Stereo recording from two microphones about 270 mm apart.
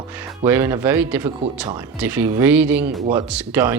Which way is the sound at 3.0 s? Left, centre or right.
Centre.